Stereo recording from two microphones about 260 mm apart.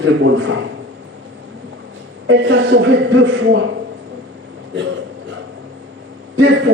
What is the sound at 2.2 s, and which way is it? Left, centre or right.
A man's voice, right.